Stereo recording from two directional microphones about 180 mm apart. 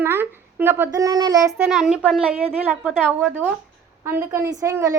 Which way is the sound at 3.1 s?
10° right (ahead or behind).